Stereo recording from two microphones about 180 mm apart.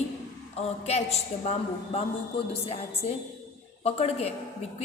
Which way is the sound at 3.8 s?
35° left (ahead or behind).